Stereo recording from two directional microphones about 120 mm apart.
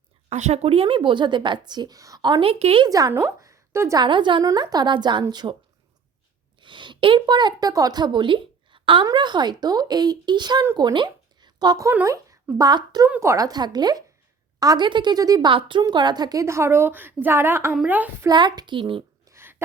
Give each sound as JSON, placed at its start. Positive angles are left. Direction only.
{"t": 0.3, "sound": "speech", "side_deg": -70}
{"t": 2.5, "sound": "a woman's voice", "side_deg": -55}
{"t": 2.8, "sound": "speech", "side_deg": -30}
{"t": 3.1, "sound": "a sound", "side_deg": -15}
{"t": 3.9, "sound": "speech", "side_deg": -40}
{"t": 6.6, "sound": "a woman's voice", "side_deg": -40}
{"t": 13.1, "sound": "a woman's voice", "side_deg": -20}
{"t": 18.3, "sound": "speech", "side_deg": -35}
{"t": 19.2, "sound": "a sound", "side_deg": -20}